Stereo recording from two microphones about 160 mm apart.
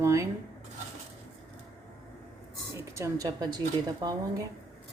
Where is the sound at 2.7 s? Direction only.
15° right (ahead or behind).